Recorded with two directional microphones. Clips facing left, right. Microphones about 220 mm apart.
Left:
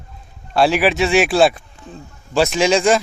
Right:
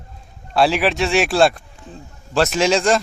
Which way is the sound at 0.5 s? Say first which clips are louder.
Left 2 dB; centre (ahead or behind).